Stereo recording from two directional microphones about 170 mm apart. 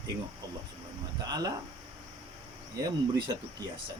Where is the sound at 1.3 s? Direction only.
20° right (ahead or behind).